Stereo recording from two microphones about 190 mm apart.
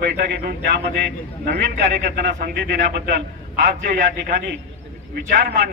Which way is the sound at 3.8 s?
45° right (ahead or behind).